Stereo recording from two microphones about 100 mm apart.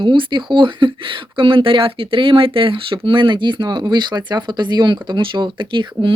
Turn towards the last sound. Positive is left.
turn(degrees=-55)  # may be behind; listen again after turning